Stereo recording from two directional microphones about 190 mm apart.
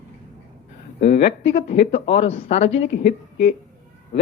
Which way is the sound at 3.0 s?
55° left (ahead or behind).